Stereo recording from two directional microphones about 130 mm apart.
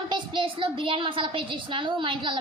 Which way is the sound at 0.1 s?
40° right (ahead or behind).